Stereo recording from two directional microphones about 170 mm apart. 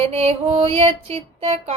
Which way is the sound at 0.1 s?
35° right (ahead or behind).